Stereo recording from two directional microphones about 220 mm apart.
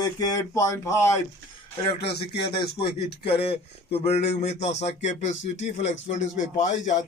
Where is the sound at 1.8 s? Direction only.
25° left (ahead or behind).